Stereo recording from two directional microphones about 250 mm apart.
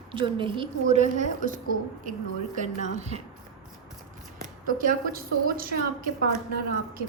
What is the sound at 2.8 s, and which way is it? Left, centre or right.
Speech, right.